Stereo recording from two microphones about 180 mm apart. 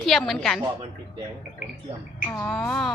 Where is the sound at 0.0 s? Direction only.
Centre (ahead or behind).